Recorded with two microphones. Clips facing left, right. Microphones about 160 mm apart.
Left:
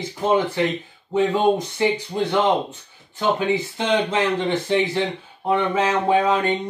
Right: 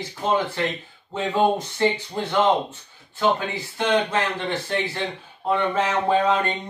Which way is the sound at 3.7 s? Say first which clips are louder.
Right 4 dB; 20° left (ahead or behind).